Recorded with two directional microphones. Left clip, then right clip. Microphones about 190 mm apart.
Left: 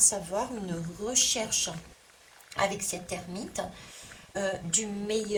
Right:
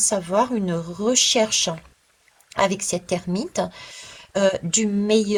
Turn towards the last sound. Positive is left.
turn(degrees=-35)  # may be behind; listen again after turning